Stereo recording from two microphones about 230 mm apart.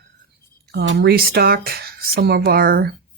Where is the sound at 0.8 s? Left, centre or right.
Right.